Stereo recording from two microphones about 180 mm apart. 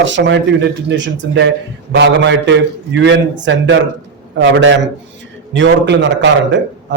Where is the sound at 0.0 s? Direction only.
90° right.